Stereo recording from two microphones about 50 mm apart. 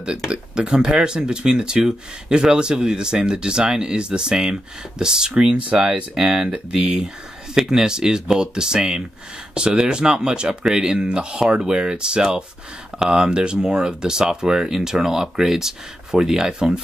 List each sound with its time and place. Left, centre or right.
0.3 s speech: centre
6.1 s speech: centre